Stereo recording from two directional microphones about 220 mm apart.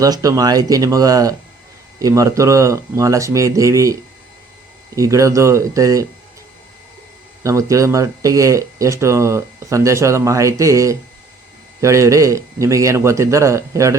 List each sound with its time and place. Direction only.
0.0 s speech: 15° right (ahead or behind)
4.9 s speech: 15° right (ahead or behind)
7.4 s speech: 15° right (ahead or behind)